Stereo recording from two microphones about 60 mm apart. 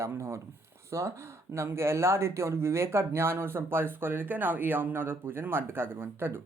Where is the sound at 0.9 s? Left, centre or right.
Right.